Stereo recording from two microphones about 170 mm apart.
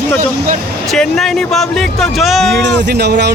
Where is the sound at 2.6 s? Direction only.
85° right.